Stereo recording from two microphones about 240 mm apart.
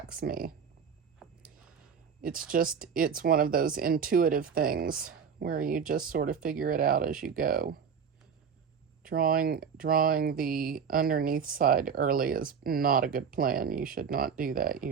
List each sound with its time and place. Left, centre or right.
0.2 s speech: right
1.2 s a sound: centre
2.5 s speech: right
9.0 s speech: right